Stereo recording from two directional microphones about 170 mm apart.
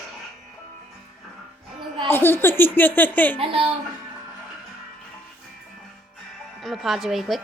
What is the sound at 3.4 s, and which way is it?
Speech, 35° right (ahead or behind).